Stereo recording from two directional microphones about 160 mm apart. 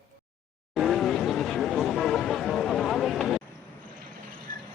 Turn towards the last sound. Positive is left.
turn(degrees=0)  # may be behind; listen again after turning